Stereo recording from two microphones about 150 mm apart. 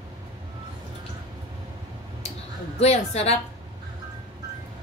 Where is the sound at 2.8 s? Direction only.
45° left (ahead or behind).